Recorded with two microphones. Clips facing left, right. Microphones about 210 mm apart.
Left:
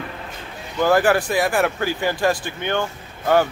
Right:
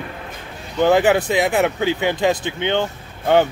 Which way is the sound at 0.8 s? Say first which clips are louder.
Right 2 dB; 20° right (ahead or behind).